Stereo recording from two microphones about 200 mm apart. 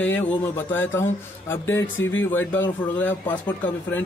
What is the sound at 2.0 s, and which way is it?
Speech, 75° left (ahead or behind).